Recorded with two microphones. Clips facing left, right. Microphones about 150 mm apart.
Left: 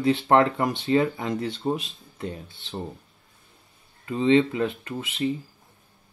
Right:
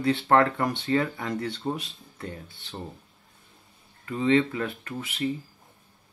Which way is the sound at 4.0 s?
20° left (ahead or behind).